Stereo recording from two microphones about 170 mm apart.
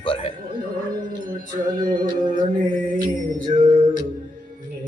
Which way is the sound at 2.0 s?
50° right (ahead or behind).